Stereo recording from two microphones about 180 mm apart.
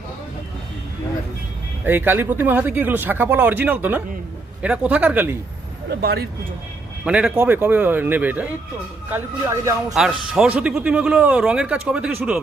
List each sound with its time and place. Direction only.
1.8 s speech: 10° right (ahead or behind)
5.9 s speech: 60° right (ahead or behind)
7.0 s speech: 5° right (ahead or behind)
9.9 s speech: 5° right (ahead or behind)